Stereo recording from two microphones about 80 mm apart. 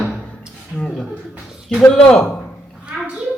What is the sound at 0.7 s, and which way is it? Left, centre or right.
Speech, centre.